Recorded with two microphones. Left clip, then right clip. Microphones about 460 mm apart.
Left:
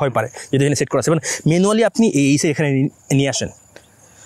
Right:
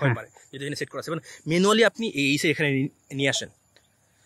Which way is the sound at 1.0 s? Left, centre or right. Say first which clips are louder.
Left 14 dB; left.